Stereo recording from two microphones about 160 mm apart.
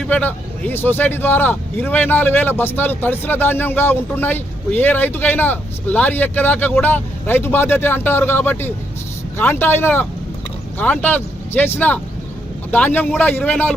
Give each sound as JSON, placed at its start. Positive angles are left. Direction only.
{"t": 0.1, "sound": "speech", "side_deg": 10}